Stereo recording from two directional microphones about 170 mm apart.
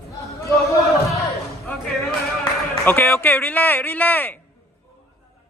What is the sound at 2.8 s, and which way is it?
Speech, 10° left (ahead or behind).